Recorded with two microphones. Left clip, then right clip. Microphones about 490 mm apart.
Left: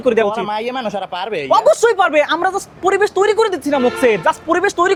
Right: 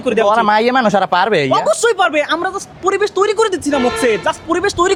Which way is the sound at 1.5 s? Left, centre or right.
Left.